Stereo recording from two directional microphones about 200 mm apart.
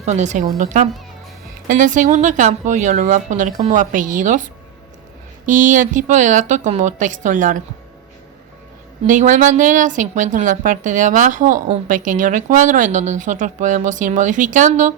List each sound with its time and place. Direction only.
0.0 s speech: 35° right (ahead or behind)
5.5 s speech: 40° right (ahead or behind)
9.0 s speech: 40° right (ahead or behind)